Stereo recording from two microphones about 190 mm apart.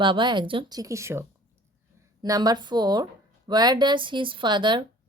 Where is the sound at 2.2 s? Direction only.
20° right (ahead or behind).